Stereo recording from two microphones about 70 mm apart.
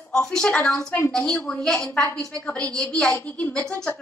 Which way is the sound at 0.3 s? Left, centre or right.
Centre.